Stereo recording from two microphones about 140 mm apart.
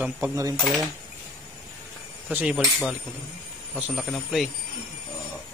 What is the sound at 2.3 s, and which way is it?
Speech, 10° right (ahead or behind).